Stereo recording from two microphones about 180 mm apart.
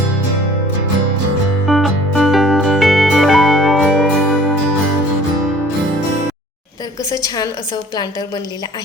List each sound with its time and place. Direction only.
1.6 s music: centre (ahead or behind)
7.1 s a woman's voice: 20° left (ahead or behind)